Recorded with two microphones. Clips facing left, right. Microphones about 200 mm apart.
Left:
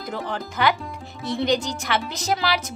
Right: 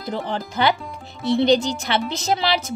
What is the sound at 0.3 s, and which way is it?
Speech, 30° right (ahead or behind).